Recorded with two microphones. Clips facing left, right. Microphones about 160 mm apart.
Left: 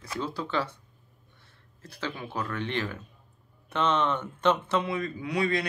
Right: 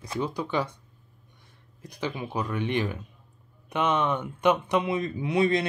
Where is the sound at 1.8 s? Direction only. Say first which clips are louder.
Right 3 dB; 15° right (ahead or behind).